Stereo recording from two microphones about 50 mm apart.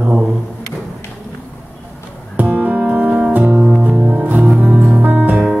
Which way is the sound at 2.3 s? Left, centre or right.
Right.